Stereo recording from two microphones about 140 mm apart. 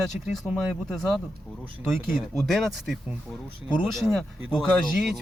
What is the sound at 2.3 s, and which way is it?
Speech, centre (ahead or behind).